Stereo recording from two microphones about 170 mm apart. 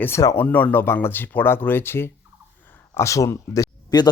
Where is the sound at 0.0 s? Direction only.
15° left (ahead or behind).